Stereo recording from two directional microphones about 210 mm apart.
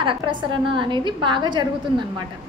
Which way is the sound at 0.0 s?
25° right (ahead or behind).